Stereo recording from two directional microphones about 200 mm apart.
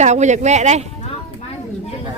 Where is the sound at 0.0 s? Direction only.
35° right (ahead or behind).